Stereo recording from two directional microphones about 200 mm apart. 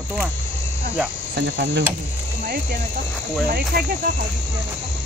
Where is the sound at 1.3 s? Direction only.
60° right (ahead or behind).